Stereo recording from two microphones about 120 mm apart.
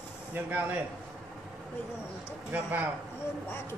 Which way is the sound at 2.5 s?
15° right (ahead or behind).